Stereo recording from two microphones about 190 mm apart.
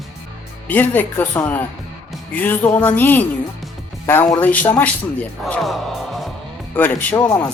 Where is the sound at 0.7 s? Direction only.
10° left (ahead or behind).